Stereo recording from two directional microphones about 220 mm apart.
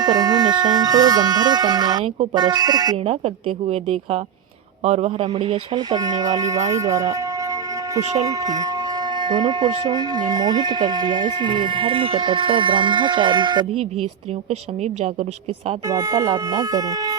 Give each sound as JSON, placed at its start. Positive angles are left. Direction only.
{"t": 0.0, "sound": "speech", "side_deg": -20}
{"t": 3.2, "sound": "speech", "side_deg": -30}
{"t": 8.2, "sound": "speech", "side_deg": -15}
{"t": 15.9, "sound": "speech", "side_deg": -15}